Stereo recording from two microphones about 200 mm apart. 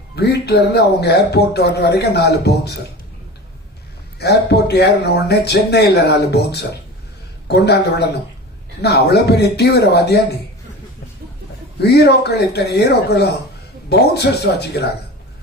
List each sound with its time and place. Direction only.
0.2 s speech: 55° left (ahead or behind)
4.2 s speech: 55° left (ahead or behind)
11.8 s speech: 55° left (ahead or behind)